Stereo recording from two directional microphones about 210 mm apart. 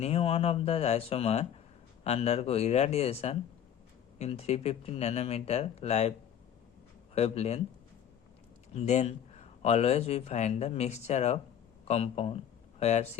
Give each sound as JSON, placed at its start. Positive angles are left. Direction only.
{"t": 0.0, "sound": "speech", "side_deg": 30}
{"t": 8.7, "sound": "speech", "side_deg": 30}